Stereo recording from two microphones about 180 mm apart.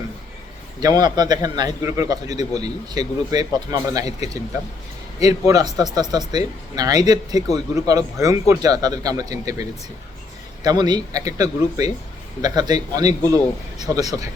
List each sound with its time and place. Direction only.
0.8 s speech: 20° right (ahead or behind)
5.2 s speech: 20° right (ahead or behind)